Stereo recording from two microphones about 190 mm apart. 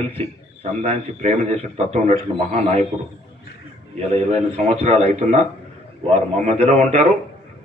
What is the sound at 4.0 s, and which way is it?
A man's voice, 35° right (ahead or behind).